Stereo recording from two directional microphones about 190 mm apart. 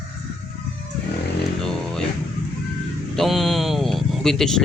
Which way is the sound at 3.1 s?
Centre (ahead or behind).